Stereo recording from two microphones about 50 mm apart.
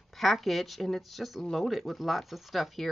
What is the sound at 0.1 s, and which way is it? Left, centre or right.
Speech, centre.